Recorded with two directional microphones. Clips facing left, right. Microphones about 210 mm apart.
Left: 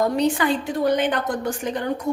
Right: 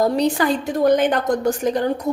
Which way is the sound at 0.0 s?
40° right (ahead or behind).